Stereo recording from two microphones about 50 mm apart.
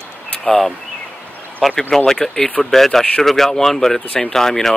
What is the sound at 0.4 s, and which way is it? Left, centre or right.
Speech, centre.